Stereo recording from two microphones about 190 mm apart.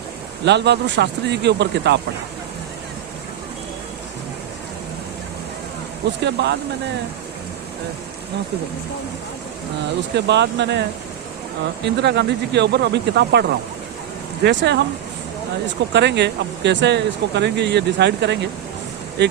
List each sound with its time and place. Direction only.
0.4 s speech: 65° right (ahead or behind)
6.2 s speech: 60° right (ahead or behind)
10.2 s speech: 65° right (ahead or behind)
11.9 s speech: 65° right (ahead or behind)
15.9 s speech: 65° right (ahead or behind)